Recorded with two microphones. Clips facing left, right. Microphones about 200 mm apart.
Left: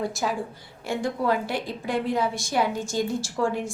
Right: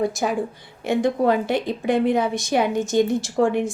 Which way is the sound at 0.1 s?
20° right (ahead or behind).